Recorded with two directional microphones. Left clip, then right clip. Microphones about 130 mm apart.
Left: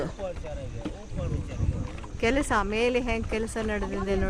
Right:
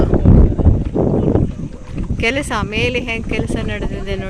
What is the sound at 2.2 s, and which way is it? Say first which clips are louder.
Speech: right 7 dB; 30° right (ahead or behind).